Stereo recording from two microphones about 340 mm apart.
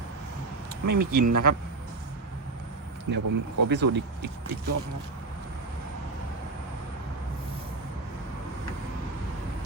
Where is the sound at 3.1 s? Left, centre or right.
Right.